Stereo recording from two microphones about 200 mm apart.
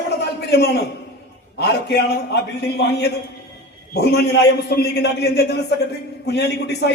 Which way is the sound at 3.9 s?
55° left (ahead or behind).